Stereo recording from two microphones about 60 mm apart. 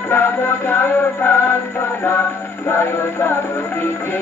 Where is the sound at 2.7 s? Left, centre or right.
Left.